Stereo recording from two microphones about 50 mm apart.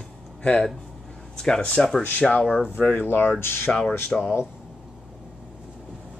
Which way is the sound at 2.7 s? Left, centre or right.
Left.